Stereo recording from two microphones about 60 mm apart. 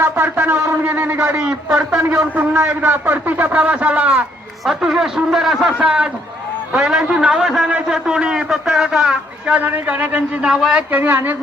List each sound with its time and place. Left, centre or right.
0.0 s a sound: right
1.1 s a man's voice: right
1.4 s a man's voice: centre
2.3 s speech: right
4.6 s a man's voice: centre
9.6 s speech: right
10.4 s a man's voice: centre
10.8 s speech: right